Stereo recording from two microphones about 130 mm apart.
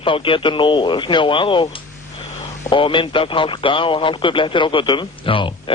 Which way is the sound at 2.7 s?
40° left (ahead or behind).